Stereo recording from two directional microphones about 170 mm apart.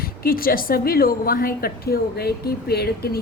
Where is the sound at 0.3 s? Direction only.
60° left (ahead or behind).